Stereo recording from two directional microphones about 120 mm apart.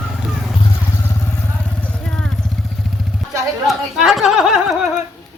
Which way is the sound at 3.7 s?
Centre (ahead or behind).